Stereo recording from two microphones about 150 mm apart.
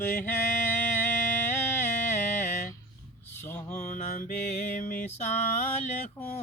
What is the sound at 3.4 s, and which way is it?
Mantra, 10° left (ahead or behind).